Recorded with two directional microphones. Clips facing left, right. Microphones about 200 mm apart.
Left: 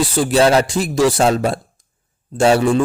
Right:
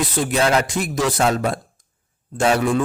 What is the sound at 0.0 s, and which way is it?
A man's voice, 30° left (ahead or behind).